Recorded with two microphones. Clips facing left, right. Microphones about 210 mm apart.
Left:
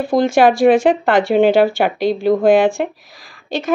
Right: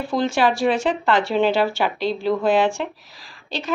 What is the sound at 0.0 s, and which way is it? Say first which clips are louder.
A woman's voice: left 7 dB; 55° left (ahead or behind).